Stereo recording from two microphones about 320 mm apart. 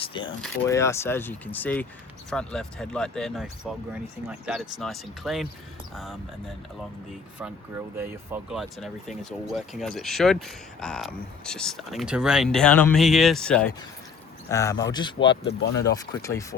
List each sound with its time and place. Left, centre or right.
0.0 s speech: centre
7.9 s speech: centre